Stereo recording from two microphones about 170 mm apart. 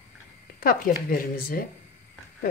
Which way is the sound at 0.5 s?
55° left (ahead or behind).